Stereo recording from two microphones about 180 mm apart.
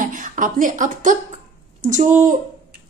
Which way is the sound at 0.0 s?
45° right (ahead or behind).